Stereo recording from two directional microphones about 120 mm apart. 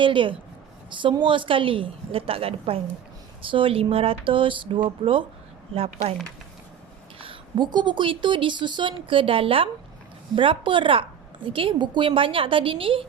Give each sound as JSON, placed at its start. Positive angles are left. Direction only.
{"t": 0.0, "sound": "a woman's voice", "side_deg": -45}
{"t": 7.2, "sound": "a woman's voice", "side_deg": -45}